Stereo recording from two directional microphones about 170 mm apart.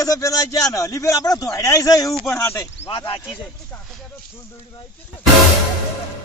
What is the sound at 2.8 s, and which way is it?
Speech, 35° left (ahead or behind).